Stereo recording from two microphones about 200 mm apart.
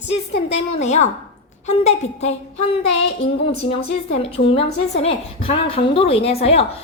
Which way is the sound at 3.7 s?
30° left (ahead or behind).